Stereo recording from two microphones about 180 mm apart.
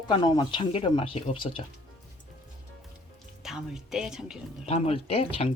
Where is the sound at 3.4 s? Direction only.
Centre (ahead or behind).